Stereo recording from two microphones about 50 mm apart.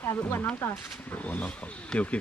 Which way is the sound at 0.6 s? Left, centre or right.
Left.